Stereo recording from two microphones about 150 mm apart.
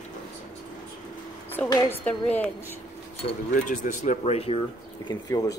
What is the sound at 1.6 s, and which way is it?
Speech, 25° left (ahead or behind).